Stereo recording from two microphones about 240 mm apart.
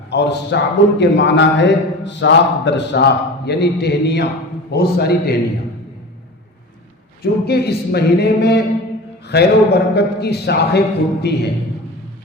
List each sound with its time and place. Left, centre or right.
0.1 s a man's voice: left
7.2 s a man's voice: left